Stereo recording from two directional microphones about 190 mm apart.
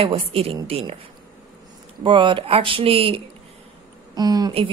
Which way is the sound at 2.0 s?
25° right (ahead or behind).